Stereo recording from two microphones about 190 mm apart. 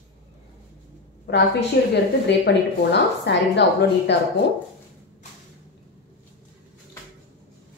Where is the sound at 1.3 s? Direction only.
60° left (ahead or behind).